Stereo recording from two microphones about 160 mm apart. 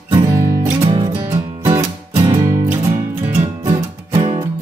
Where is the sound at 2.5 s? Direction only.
20° right (ahead or behind).